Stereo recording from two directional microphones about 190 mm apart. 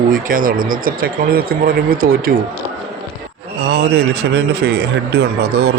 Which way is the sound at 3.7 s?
60° right (ahead or behind).